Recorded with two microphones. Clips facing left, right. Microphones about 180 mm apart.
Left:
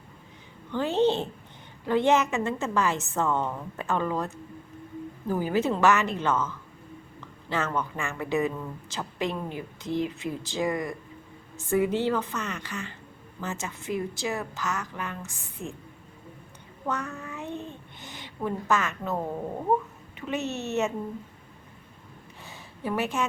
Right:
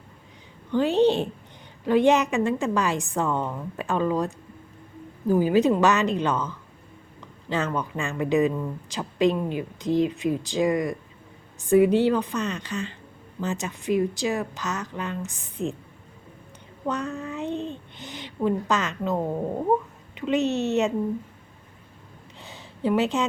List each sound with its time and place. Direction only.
0.7 s a woman's voice: 15° right (ahead or behind)
7.5 s a woman's voice: 15° right (ahead or behind)
16.8 s a child's voice: 20° right (ahead or behind)
22.4 s a sound: 20° right (ahead or behind)